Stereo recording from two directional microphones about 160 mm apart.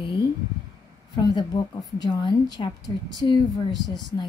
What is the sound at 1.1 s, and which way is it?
A woman's voice, 25° left (ahead or behind).